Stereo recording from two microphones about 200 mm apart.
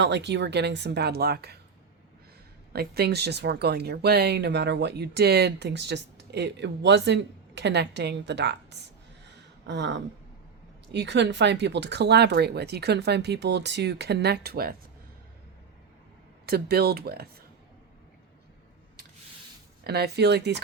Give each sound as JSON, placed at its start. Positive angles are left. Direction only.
{"t": 0.0, "sound": "speech", "side_deg": -60}
{"t": 2.7, "sound": "speech", "side_deg": -50}
{"t": 16.5, "sound": "speech", "side_deg": -50}
{"t": 19.8, "sound": "speech", "side_deg": -55}